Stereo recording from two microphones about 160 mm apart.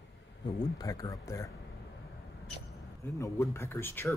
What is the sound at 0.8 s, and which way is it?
Speech, 20° left (ahead or behind).